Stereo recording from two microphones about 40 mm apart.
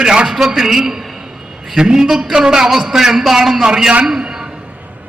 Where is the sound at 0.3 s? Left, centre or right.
Centre.